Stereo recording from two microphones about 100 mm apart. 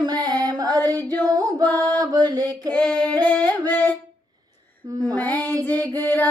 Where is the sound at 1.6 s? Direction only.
15° left (ahead or behind).